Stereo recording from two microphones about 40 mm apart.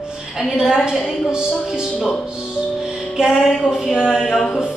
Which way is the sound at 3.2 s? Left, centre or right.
Centre.